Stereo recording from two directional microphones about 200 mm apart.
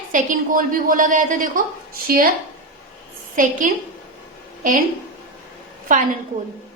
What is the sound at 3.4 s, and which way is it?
Speech, 40° right (ahead or behind).